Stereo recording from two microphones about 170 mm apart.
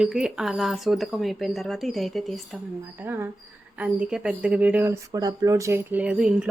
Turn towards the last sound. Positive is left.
turn(degrees=-5)  # may be behind; listen again after turning